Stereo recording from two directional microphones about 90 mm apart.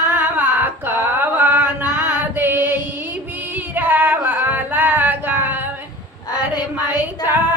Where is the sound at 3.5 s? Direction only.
20° right (ahead or behind).